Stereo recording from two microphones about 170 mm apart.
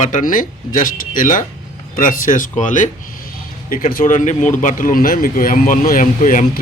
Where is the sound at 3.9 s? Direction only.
50° left (ahead or behind).